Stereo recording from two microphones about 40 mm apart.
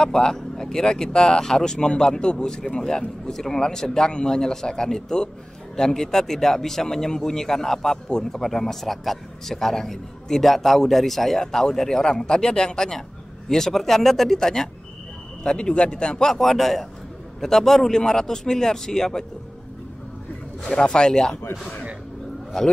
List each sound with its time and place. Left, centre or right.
0.0 s a man's voice: centre
16.3 s a man's voice: centre
20.6 s a man's voice: left